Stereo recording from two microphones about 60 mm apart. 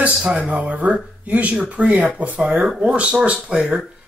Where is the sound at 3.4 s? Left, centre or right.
Centre.